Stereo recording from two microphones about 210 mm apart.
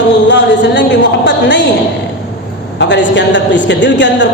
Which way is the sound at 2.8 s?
55° left (ahead or behind).